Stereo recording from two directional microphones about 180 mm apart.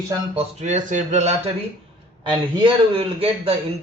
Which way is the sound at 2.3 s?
30° right (ahead or behind).